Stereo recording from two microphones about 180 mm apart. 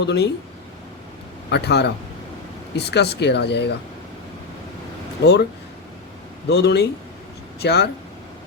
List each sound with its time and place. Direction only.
0.0 s speech: 75° left (ahead or behind)
1.5 s speech: 70° left (ahead or behind)
6.5 s speech: 70° left (ahead or behind)